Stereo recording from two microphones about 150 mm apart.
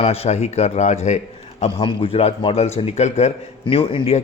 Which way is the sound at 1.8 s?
35° left (ahead or behind).